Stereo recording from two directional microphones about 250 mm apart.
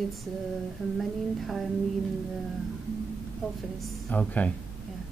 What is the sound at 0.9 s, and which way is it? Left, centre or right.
Speech, centre.